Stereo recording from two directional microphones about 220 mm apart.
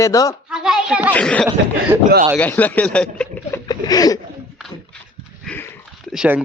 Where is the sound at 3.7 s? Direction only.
15° left (ahead or behind).